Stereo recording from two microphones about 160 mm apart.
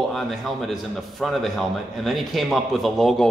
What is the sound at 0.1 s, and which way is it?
A man's voice, centre (ahead or behind).